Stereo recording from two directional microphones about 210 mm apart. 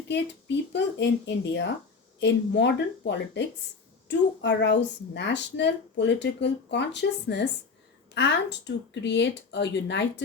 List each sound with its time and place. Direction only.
0.1 s speech: 55° left (ahead or behind)